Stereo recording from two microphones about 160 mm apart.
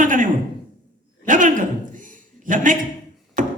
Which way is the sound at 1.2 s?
55° right (ahead or behind).